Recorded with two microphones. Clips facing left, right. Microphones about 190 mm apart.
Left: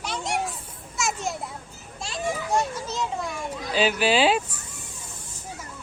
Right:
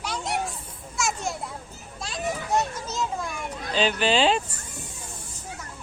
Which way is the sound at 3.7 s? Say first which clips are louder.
Left 1 dB; 10° left (ahead or behind).